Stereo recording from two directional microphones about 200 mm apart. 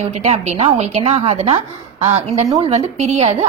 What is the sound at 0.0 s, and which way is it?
A woman's voice, 35° right (ahead or behind).